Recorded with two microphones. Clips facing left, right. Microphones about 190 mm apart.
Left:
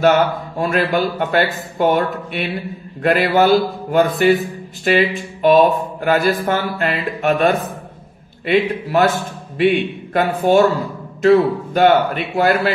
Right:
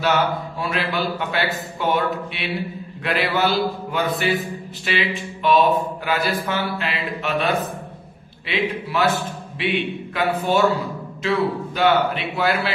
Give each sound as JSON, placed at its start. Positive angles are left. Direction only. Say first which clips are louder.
{"t": 0.0, "sound": "speech", "louder": "left 6 dB", "side_deg": 50}